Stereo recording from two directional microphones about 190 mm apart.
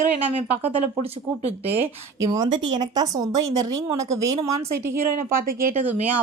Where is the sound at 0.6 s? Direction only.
30° right (ahead or behind).